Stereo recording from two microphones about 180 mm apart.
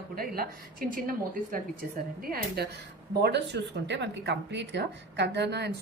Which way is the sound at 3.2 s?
70° right (ahead or behind).